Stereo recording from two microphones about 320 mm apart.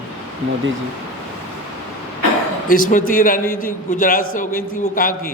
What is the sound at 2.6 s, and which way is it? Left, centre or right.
A man's voice, left.